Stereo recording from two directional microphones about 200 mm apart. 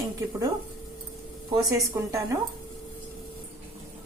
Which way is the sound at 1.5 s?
15° right (ahead or behind).